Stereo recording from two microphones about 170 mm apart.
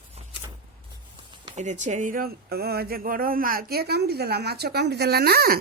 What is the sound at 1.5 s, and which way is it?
A woman's voice, 45° right (ahead or behind).